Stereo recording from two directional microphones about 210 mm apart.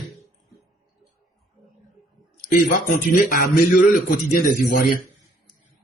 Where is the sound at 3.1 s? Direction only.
45° left (ahead or behind).